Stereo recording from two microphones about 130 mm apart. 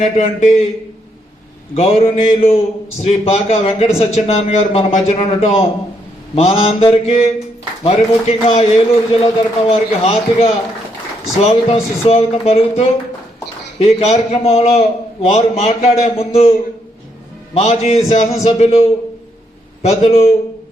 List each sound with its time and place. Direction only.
0.0 s a man's voice: 55° left (ahead or behind)
1.7 s a man's voice: 55° left (ahead or behind)